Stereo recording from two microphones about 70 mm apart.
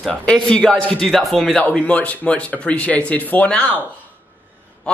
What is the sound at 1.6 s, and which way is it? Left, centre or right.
Speech, centre.